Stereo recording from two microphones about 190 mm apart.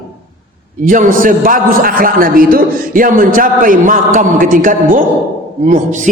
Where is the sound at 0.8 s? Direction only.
45° right (ahead or behind).